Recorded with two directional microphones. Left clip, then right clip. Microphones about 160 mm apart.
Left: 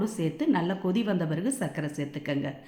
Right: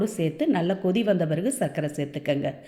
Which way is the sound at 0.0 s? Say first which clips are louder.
Right 4 dB; 15° right (ahead or behind).